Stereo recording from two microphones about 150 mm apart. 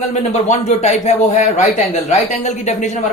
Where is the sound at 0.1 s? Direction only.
50° left (ahead or behind).